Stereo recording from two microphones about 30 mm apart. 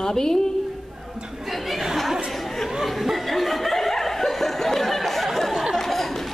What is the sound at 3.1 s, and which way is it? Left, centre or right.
Laughter, centre.